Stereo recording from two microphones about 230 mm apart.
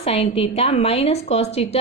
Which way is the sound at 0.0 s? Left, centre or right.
Left.